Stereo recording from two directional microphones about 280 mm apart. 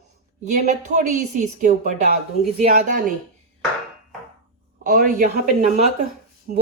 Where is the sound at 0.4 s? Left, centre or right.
Right.